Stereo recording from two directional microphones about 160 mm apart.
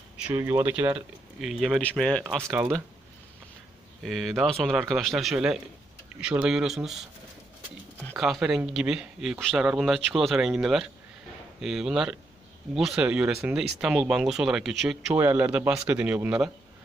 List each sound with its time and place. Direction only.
0.3 s speech: 15° right (ahead or behind)
1.4 s speech: centre (ahead or behind)
4.0 s speech: centre (ahead or behind)
8.2 s speech: centre (ahead or behind)